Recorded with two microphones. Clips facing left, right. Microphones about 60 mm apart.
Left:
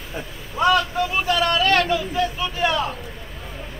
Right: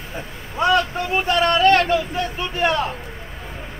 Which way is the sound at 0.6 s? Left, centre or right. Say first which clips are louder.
Even; right.